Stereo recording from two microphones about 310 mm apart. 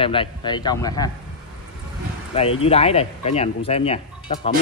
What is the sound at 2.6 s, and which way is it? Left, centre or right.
A man's voice, centre.